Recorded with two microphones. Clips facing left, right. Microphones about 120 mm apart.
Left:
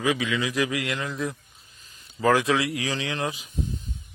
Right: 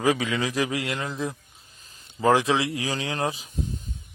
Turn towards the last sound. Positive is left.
turn(degrees=-35)  # may be behind; listen again after turning